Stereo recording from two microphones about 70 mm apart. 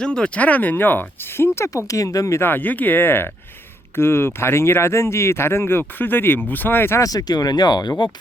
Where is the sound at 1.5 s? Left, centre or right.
Left.